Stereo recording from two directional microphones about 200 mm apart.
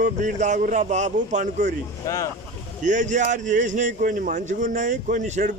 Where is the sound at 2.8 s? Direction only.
40° right (ahead or behind).